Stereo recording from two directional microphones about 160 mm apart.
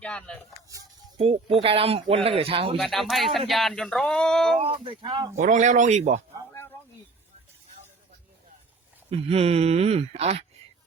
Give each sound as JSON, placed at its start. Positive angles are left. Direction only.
{"t": 0.0, "sound": "speech", "side_deg": 5}
{"t": 1.6, "sound": "speech", "side_deg": -35}
{"t": 2.7, "sound": "speech", "side_deg": 0}
{"t": 4.6, "sound": "speech", "side_deg": -35}
{"t": 5.4, "sound": "speech", "side_deg": -50}
{"t": 9.0, "sound": "speech", "side_deg": -40}